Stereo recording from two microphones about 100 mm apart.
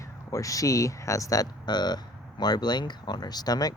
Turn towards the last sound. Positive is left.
turn(degrees=40)  # may be behind; listen again after turning